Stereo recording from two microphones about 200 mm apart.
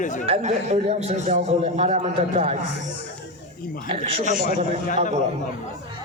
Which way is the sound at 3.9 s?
30° right (ahead or behind).